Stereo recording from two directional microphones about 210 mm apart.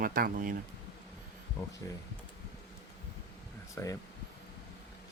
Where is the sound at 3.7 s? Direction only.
15° left (ahead or behind).